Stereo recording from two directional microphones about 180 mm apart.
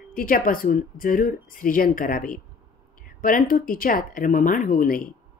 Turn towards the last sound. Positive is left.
turn(degrees=50)  # may be behind; listen again after turning